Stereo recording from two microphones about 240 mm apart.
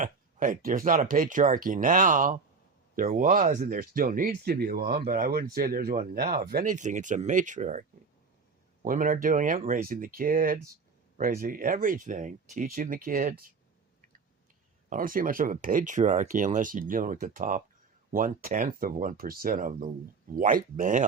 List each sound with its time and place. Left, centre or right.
0.0 s speech: right
14.8 s speech: right